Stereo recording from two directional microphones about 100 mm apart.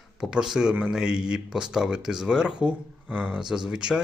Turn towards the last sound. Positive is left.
turn(degrees=-5)  # may be behind; listen again after turning